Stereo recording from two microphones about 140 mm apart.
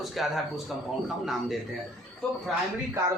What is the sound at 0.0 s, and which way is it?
A man's voice, centre (ahead or behind).